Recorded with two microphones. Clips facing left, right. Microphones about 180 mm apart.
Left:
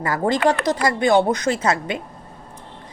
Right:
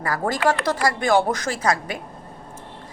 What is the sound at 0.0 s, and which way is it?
A woman's voice, 25° left (ahead or behind).